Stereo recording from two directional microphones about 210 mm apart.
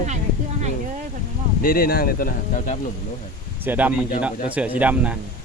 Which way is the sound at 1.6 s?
45° left (ahead or behind).